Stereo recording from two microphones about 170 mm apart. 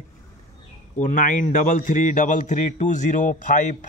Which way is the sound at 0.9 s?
50° left (ahead or behind).